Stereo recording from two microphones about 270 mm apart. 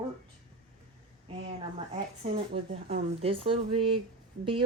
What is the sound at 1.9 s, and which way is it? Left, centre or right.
Speech, right.